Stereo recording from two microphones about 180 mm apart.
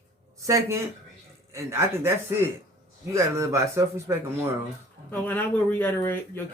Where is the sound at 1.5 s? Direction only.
15° right (ahead or behind).